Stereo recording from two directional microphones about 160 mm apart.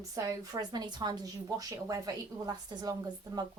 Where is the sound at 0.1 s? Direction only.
20° right (ahead or behind).